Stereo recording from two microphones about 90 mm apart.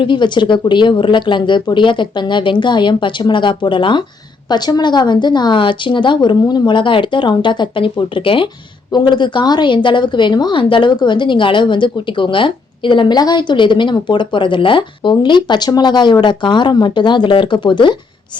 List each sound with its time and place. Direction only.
0.0 s a woman's voice: 60° left (ahead or behind)
4.4 s a woman's voice: 50° left (ahead or behind); by 8.4 s 75° left (ahead or behind)
8.9 s a woman's voice: 60° left (ahead or behind)
10.6 s a woman's voice: 70° left (ahead or behind); by 13.4 s 50° left (ahead or behind)
13.5 s a woman's voice: 60° left (ahead or behind)